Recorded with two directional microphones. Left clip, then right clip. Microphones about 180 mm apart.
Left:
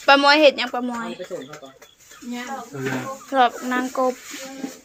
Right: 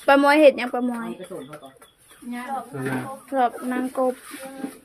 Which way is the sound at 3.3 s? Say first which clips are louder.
Left 4 dB; 15° right (ahead or behind).